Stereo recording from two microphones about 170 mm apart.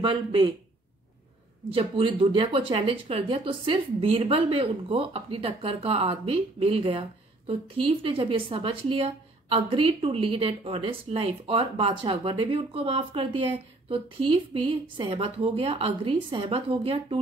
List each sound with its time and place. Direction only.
0.0 s speech: 30° right (ahead or behind)
1.7 s speech: 30° right (ahead or behind)